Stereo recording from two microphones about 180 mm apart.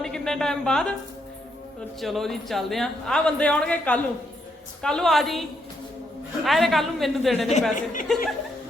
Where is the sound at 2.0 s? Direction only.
Centre (ahead or behind).